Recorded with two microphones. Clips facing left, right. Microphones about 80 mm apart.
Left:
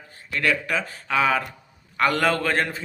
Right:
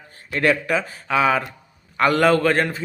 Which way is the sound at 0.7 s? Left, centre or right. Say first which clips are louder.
Right 4 dB; centre.